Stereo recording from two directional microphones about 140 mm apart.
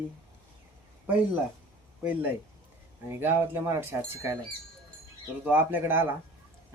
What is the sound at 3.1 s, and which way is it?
Speech, 15° right (ahead or behind).